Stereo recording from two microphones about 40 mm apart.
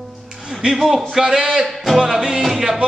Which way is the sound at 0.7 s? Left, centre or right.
Centre.